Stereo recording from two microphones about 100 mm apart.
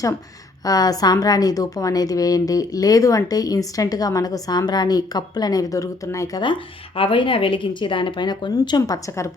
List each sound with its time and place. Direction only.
0.6 s a woman's voice: 40° left (ahead or behind)
6.4 s speech: 60° left (ahead or behind)